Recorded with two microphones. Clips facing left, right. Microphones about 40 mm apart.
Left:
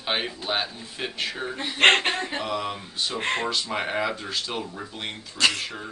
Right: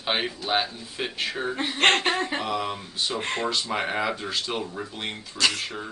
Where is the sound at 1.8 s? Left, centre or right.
Left.